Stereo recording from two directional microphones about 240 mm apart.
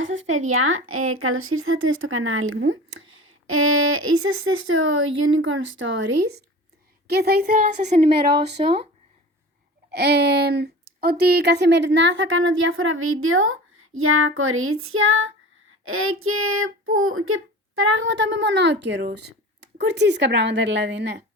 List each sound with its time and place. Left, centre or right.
0.0 s speech: right
3.0 s a sound: right
3.5 s speech: right
7.1 s speech: right
9.9 s a woman's voice: right